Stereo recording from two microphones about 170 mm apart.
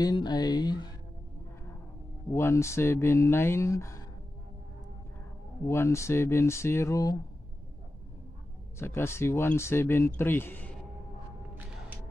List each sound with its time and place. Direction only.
0.0 s speech: 25° left (ahead or behind)
2.3 s speech: 15° left (ahead or behind)
5.7 s speech: 15° left (ahead or behind)
8.7 s speech: 15° left (ahead or behind)